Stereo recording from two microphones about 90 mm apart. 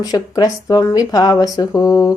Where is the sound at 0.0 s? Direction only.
45° left (ahead or behind).